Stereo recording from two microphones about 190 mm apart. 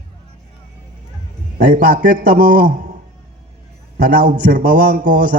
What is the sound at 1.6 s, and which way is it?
A man's voice, 45° right (ahead or behind).